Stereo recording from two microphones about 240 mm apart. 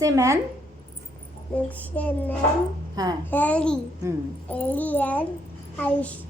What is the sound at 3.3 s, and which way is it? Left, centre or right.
A child's voice, centre.